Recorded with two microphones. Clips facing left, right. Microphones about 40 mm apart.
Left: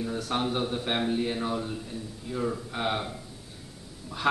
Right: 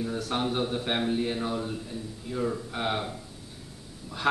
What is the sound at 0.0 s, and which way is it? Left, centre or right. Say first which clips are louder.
Speech: even; centre.